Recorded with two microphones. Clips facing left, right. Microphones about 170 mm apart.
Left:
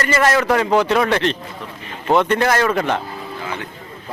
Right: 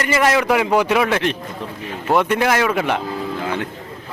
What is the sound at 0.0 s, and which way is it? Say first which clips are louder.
A man's voice: even; 10° right (ahead or behind).